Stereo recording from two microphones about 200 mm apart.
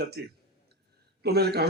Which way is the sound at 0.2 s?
55° right (ahead or behind).